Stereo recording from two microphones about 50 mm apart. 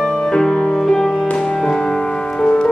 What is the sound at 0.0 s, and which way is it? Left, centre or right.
Music, centre.